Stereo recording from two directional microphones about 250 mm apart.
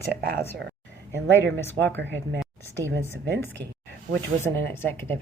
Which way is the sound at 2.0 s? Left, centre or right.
Right.